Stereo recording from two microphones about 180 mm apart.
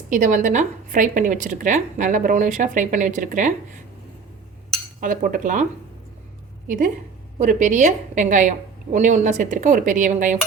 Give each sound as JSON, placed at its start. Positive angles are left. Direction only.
{"t": 0.1, "sound": "a woman's voice", "side_deg": -45}
{"t": 4.9, "sound": "a woman's voice", "side_deg": -50}
{"t": 6.7, "sound": "a woman's voice", "side_deg": -50}